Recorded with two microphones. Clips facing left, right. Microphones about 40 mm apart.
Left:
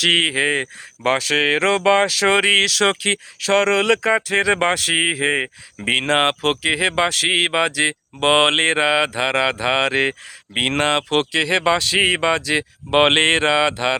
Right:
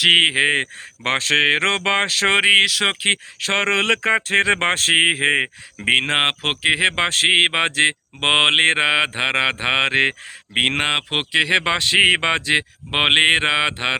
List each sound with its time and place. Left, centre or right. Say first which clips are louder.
0.2 s speech: right 2 dB; right
1.7 s a sound: left 4 dB; right
2.4 s speech: right 1 dB; right
5.8 s speech: even; right
10.8 s speech: left 3 dB; centre; by 12.6 s right
12.9 s speech: left 1 dB; centre